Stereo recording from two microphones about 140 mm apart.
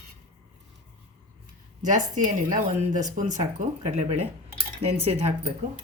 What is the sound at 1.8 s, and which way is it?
A woman's voice, 65° right (ahead or behind).